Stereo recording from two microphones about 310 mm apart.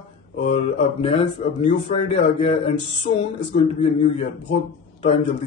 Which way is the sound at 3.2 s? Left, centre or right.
Centre.